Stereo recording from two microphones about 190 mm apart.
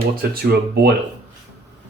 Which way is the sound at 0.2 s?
55° right (ahead or behind).